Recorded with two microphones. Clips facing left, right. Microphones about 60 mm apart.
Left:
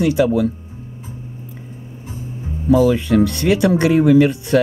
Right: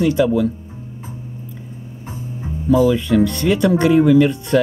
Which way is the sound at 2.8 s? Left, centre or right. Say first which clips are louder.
Even; centre.